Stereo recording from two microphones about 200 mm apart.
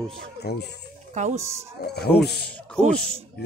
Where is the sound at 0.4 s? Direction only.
55° left (ahead or behind).